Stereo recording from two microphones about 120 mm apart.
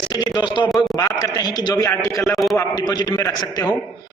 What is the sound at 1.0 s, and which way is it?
A man's voice, 30° left (ahead or behind).